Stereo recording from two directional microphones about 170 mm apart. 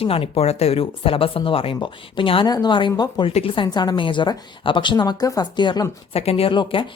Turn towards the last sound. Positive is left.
turn(degrees=30)  # may be behind; listen again after turning